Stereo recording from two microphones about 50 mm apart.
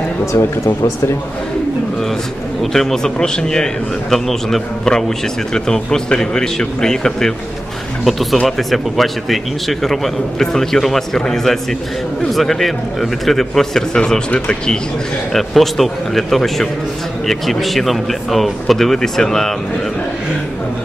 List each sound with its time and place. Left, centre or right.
0.2 s speech: left
2.6 s a man's voice: centre
8.0 s speech: centre
15.3 s speech: centre